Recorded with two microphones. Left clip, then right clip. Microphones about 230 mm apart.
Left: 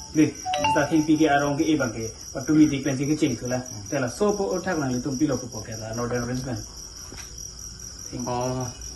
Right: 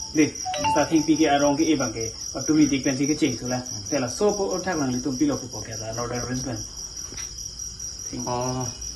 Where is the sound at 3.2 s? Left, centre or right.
Right.